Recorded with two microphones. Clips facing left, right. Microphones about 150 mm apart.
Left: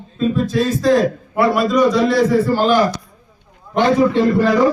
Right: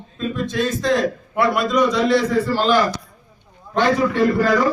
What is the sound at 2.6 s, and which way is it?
A man's voice, 15° left (ahead or behind).